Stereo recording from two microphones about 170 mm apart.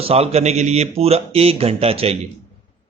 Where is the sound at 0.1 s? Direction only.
35° right (ahead or behind).